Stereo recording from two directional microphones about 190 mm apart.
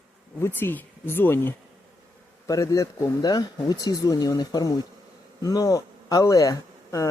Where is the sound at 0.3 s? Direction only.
10° left (ahead or behind).